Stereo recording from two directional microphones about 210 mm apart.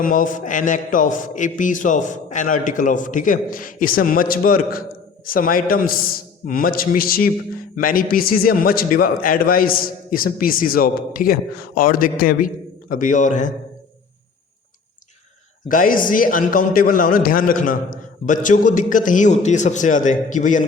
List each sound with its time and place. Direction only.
0.0 s a man's voice: 40° left (ahead or behind)
15.7 s a man's voice: 40° left (ahead or behind)